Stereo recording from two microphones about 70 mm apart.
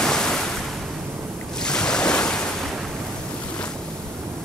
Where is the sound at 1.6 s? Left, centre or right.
Centre.